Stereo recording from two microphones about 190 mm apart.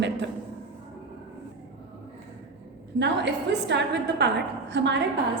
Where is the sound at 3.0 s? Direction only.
65° right (ahead or behind).